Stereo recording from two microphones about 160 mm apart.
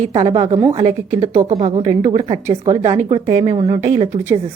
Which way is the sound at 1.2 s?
40° right (ahead or behind).